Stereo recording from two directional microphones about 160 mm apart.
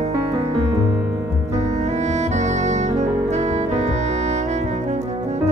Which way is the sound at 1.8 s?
45° right (ahead or behind).